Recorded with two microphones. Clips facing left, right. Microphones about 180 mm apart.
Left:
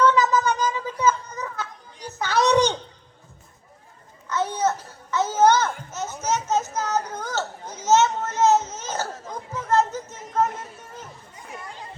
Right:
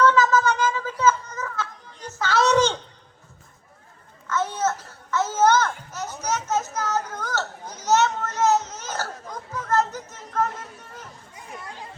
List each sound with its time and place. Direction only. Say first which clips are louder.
0.0 s a sound: right 1 dB; 15° left (ahead or behind)
4.3 s babbling: left 1 dB; 15° left (ahead or behind)
7.2 s a sound: left 1 dB; 20° left (ahead or behind)
7.7 s children playing: left 2 dB; 20° left (ahead or behind)
8.7 s baby cry: left 2 dB; 20° left (ahead or behind)
9.3 s chatter: left 2 dB; 20° left (ahead or behind)